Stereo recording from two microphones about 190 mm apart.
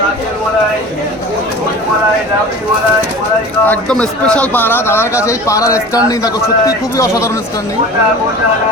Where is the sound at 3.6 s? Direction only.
5° left (ahead or behind).